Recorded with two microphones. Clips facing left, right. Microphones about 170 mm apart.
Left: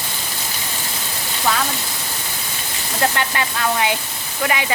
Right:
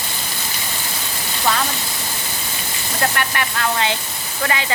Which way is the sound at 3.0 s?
20° left (ahead or behind).